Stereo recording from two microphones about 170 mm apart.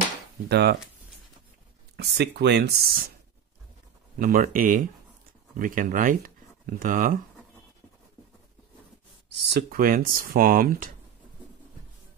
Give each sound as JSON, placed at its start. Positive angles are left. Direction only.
{"t": 0.5, "sound": "speech", "side_deg": -75}
{"t": 2.0, "sound": "speech", "side_deg": -75}
{"t": 4.2, "sound": "speech", "side_deg": -55}
{"t": 9.5, "sound": "speech", "side_deg": -65}